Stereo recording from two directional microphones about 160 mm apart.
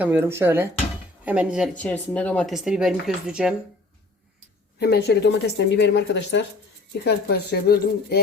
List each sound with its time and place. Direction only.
0.0 s speech: 10° right (ahead or behind)
1.7 s speech: 10° left (ahead or behind)
2.6 s speech: 5° right (ahead or behind)
4.8 s speech: 90° left